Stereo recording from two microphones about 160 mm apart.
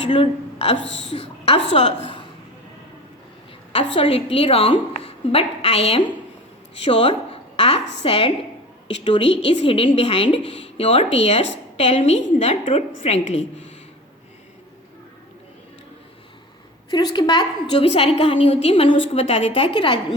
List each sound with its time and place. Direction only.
0.1 s a woman's voice: 35° left (ahead or behind)
3.7 s a woman's voice: 35° left (ahead or behind)
6.8 s a sound: 35° left (ahead or behind)
8.0 s a woman's voice: 35° left (ahead or behind)
16.9 s a woman's voice: 25° left (ahead or behind)
17.8 s a woman's voice: 40° left (ahead or behind)